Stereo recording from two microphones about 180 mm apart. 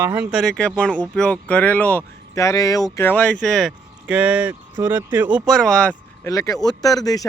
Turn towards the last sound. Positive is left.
turn(degrees=20)  # may be behind; listen again after turning